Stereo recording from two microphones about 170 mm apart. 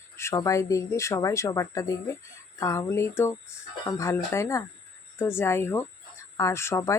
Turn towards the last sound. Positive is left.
turn(degrees=15)  # may be behind; listen again after turning